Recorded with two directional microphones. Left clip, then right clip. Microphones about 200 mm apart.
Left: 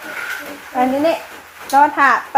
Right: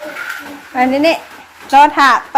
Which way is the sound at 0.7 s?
10° right (ahead or behind).